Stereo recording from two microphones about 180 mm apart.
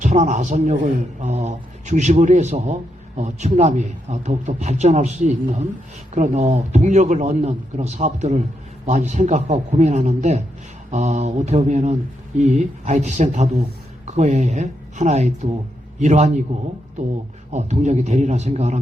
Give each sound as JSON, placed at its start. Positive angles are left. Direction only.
{"t": 0.0, "sound": "a man's voice", "side_deg": -40}
{"t": 17.5, "sound": "a man's voice", "side_deg": -40}